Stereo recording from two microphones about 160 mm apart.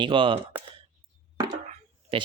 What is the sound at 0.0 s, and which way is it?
Speech, 30° right (ahead or behind).